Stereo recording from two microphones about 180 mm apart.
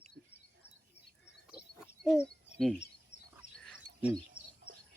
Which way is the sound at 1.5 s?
5° right (ahead or behind).